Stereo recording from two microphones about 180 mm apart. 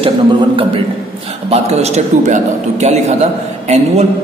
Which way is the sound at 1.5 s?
35° right (ahead or behind).